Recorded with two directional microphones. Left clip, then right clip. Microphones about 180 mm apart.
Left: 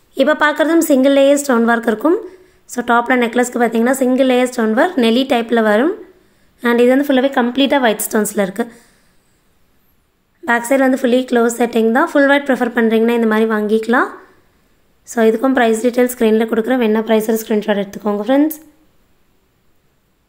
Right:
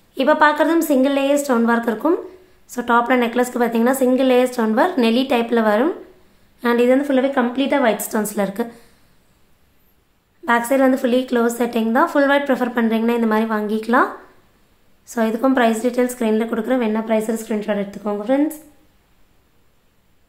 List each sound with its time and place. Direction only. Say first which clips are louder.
0.1 s a woman's voice: left 1 dB; 30° left (ahead or behind)
10.4 s a woman's voice: left 2 dB; 25° left (ahead or behind)